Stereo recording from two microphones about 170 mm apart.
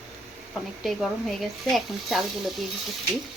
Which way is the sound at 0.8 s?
Centre (ahead or behind).